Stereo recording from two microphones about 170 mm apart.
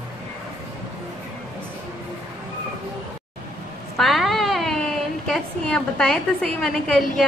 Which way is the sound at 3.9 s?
Centre (ahead or behind).